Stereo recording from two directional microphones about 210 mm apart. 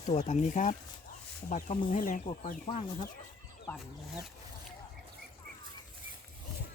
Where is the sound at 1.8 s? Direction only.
40° left (ahead or behind).